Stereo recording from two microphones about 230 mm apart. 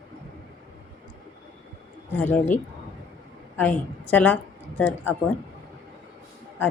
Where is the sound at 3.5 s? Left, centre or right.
Centre.